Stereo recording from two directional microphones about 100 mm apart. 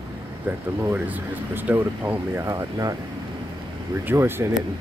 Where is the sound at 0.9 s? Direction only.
15° right (ahead or behind).